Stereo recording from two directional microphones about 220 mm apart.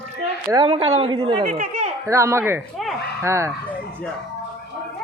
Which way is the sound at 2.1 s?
15° right (ahead or behind).